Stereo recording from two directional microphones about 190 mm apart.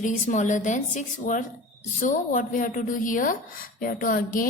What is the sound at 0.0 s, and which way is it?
A woman's voice, 40° left (ahead or behind).